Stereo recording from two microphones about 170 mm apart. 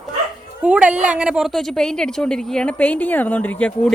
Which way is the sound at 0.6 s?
10° right (ahead or behind).